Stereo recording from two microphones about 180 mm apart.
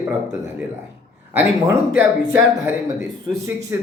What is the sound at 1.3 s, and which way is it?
A man's voice, 10° right (ahead or behind).